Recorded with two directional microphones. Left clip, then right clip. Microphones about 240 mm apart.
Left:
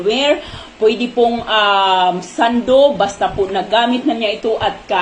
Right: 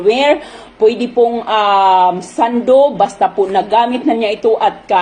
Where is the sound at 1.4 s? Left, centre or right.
Right.